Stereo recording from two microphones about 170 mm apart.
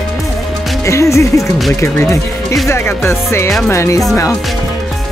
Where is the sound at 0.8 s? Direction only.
15° left (ahead or behind).